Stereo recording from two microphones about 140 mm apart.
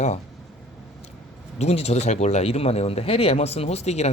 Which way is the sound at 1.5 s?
50° left (ahead or behind).